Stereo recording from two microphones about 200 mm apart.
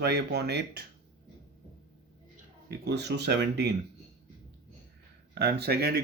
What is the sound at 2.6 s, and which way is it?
Speech, 55° right (ahead or behind).